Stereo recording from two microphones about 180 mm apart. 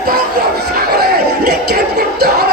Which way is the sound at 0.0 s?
60° right (ahead or behind).